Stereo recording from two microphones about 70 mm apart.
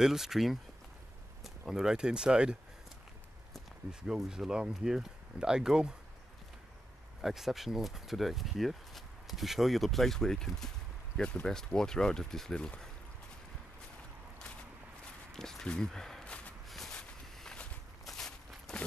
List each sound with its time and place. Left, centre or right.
0.0 s speech: centre
1.7 s speech: centre
4.1 s speech: centre
7.2 s speech: centre
15.3 s speech: centre
16.3 s a sound: centre
16.6 s a sound: centre
16.9 s walk: centre